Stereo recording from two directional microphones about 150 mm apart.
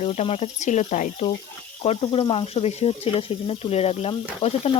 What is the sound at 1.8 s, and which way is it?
Speech, 40° left (ahead or behind).